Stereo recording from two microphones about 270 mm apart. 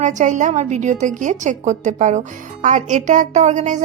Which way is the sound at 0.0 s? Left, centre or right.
Right.